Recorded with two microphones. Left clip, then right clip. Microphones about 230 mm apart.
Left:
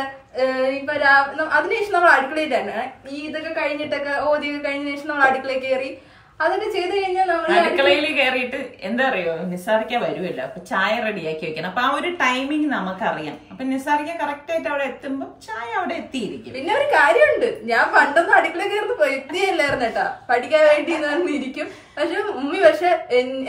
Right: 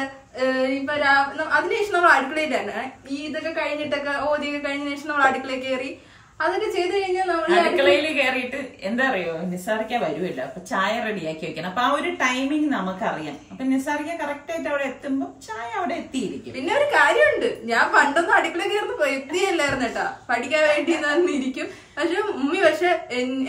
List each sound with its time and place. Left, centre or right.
0.4 s a woman's voice: centre
7.4 s a woman's voice: centre
16.5 s a woman's voice: centre